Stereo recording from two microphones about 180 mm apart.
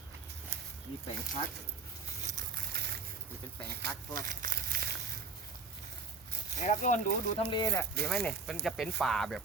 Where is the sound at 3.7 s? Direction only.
60° right (ahead or behind).